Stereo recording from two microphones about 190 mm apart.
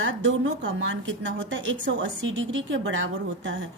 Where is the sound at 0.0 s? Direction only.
80° right.